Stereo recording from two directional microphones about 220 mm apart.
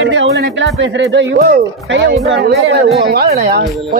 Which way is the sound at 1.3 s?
45° right (ahead or behind).